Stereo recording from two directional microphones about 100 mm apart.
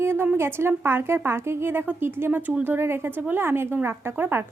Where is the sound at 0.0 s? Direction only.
25° right (ahead or behind).